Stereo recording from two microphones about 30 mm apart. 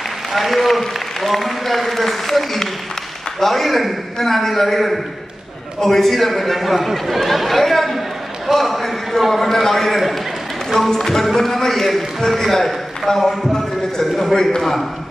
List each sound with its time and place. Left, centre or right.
0.3 s a man's voice: centre
8.5 s a sound: centre
9.3 s a man's voice: centre
14.3 s a man's voice: centre
14.6 s a man's voice: centre